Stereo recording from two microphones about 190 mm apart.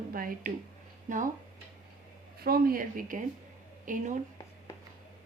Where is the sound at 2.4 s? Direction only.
50° right (ahead or behind).